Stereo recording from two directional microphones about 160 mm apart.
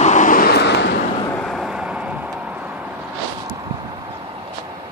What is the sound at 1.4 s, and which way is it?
Vehicle, centre (ahead or behind).